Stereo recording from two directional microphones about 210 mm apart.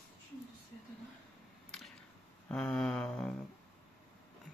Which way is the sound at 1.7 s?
Centre (ahead or behind).